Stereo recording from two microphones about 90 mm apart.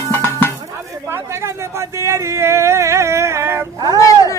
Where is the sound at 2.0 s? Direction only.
35° right (ahead or behind).